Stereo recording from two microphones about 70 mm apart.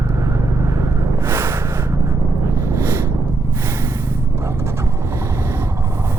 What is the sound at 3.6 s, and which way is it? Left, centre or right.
Vehicle, right.